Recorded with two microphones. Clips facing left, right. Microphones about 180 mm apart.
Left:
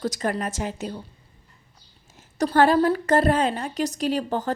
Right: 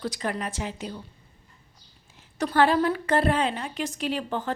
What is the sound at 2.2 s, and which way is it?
A woman's voice, 40° left (ahead or behind).